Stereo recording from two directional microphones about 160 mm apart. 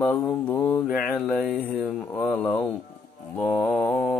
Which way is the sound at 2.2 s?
10° left (ahead or behind).